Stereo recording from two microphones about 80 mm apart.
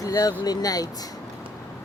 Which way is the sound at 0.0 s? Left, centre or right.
Left.